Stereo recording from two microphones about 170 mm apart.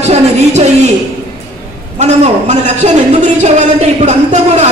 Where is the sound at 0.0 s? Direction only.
40° right (ahead or behind).